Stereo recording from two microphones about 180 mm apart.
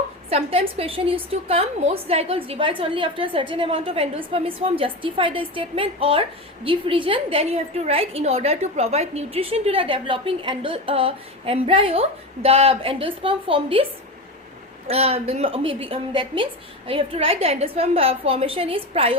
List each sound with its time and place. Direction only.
0.3 s a woman's voice: 35° right (ahead or behind)
14.8 s a woman's voice: 35° right (ahead or behind)